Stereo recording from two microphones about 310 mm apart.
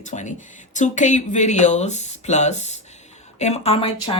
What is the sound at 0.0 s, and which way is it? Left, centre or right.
Speech, left.